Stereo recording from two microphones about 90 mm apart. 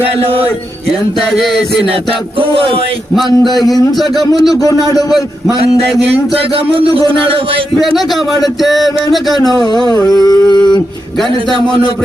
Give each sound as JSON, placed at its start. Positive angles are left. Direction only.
{"t": 1.3, "sound": "a man's voice", "side_deg": 0}
{"t": 3.2, "sound": "a man's voice", "side_deg": 0}
{"t": 6.7, "sound": "speech", "side_deg": -90}
{"t": 7.8, "sound": "a man's voice", "side_deg": 0}
{"t": 9.5, "sound": "a sound", "side_deg": -60}
{"t": 9.9, "sound": "a sound", "side_deg": 45}